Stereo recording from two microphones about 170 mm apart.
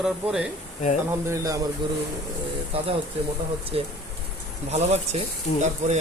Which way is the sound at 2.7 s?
35° right (ahead or behind).